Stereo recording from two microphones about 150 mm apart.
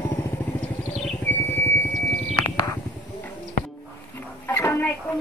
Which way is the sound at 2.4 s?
25° left (ahead or behind).